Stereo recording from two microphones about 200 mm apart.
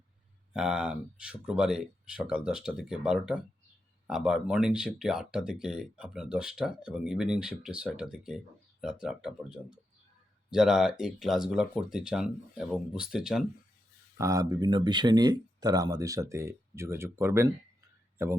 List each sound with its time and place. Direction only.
0.5 s speech: 5° right (ahead or behind)
14.2 s speech: 15° right (ahead or behind)